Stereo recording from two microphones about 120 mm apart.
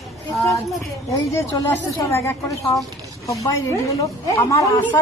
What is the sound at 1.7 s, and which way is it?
A woman's voice, 20° left (ahead or behind).